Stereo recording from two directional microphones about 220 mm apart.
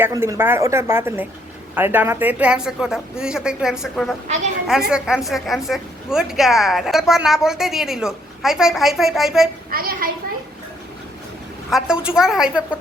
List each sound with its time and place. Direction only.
0.0 s a woman's voice: 10° right (ahead or behind)
9.6 s a child's voice: 40° right (ahead or behind)
11.7 s a woman's voice: 5° right (ahead or behind)